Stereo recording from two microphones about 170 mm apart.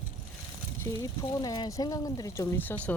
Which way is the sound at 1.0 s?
20° left (ahead or behind).